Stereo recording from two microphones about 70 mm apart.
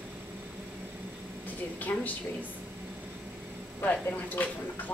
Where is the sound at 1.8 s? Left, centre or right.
Left.